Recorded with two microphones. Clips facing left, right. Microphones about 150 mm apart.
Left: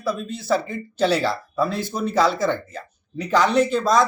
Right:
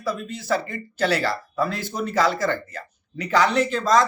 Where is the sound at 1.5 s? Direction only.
15° left (ahead or behind).